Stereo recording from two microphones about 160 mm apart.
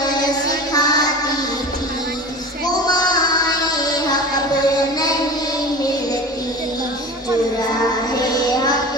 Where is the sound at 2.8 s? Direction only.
25° left (ahead or behind).